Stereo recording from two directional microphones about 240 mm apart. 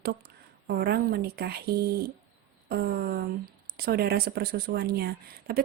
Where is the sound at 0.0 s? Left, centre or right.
Right.